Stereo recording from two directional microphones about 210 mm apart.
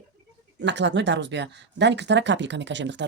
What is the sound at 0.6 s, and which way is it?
Speech, 55° right (ahead or behind).